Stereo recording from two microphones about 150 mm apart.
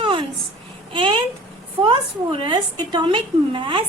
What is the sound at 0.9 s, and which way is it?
Babbling, 35° right (ahead or behind).